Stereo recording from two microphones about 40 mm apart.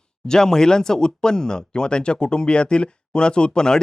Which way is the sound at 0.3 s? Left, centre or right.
Centre.